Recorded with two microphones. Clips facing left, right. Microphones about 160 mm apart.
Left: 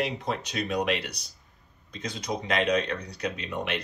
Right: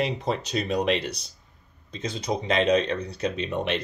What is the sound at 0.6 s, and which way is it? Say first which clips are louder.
Speech: right 3 dB; 30° right (ahead or behind).